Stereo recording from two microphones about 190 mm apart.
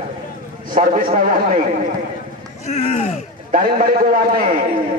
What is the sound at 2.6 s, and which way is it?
Speech, 40° left (ahead or behind).